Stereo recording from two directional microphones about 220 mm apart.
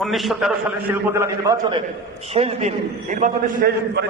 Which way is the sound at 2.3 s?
30° right (ahead or behind).